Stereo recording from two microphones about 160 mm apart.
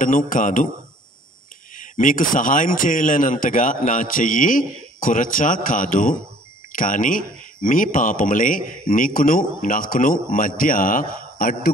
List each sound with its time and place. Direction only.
0.0 s speech: 55° left (ahead or behind)
1.8 s speech: 55° left (ahead or behind)